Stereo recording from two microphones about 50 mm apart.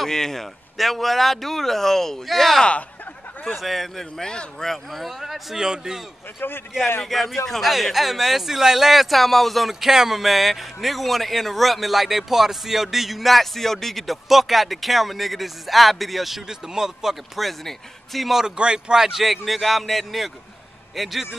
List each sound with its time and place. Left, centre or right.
0.0 s speech: centre
5.3 s a man's voice: centre
6.4 s a man's voice: left
7.0 s speech: centre
18.3 s speech: centre